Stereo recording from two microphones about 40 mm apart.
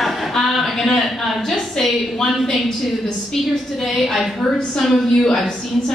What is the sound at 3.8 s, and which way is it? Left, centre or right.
Speech, centre.